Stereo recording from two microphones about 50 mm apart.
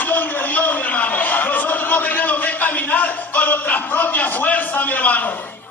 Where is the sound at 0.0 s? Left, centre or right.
Left.